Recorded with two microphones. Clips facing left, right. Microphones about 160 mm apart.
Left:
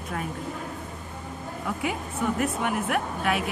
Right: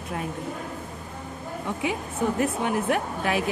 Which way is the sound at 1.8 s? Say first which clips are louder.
Right 3 dB; 30° right (ahead or behind).